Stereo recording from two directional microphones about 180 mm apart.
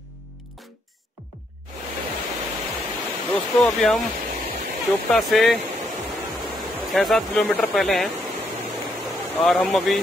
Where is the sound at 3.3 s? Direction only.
Centre (ahead or behind).